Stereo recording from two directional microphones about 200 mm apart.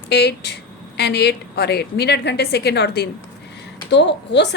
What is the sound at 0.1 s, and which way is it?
Speech, 55° left (ahead or behind).